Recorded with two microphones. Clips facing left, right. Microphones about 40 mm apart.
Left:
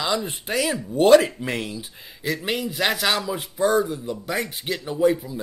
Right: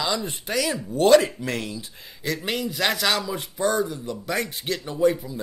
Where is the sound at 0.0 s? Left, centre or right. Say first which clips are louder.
Left 2 dB; left.